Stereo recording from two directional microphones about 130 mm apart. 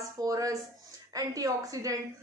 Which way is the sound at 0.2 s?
25° right (ahead or behind).